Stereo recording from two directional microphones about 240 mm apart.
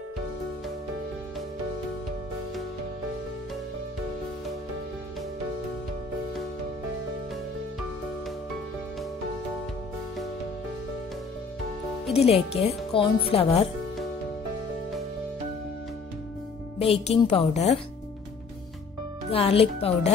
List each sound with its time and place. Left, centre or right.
12.1 s speech: left
16.7 s speech: left
19.3 s speech: left